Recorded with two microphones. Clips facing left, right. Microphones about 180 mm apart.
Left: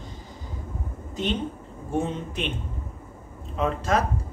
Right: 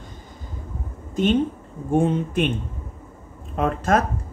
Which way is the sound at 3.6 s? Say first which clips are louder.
Right 4 dB; 50° right (ahead or behind).